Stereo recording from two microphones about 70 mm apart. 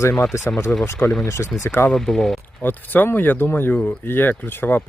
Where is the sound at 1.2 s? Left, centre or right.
Left.